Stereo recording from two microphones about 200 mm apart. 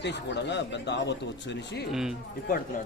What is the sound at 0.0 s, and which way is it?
Speech, 60° left (ahead or behind).